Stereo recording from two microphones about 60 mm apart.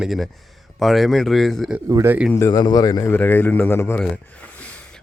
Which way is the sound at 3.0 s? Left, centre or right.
Left.